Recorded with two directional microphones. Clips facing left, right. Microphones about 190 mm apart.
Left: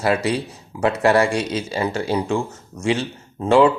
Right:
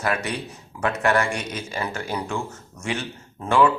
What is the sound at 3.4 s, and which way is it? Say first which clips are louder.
Speech: left 5 dB; 25° left (ahead or behind).